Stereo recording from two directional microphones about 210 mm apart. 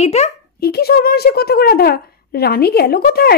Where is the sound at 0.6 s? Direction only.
50° left (ahead or behind).